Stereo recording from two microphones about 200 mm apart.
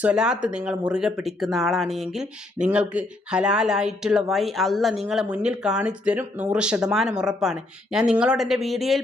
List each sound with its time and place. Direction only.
0.0 s speech: 5° right (ahead or behind)